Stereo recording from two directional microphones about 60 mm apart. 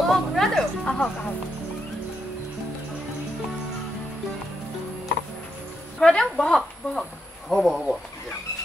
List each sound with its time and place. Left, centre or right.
0.0 s speech: centre
0.8 s a woman's voice: centre
5.9 s a woman's voice: centre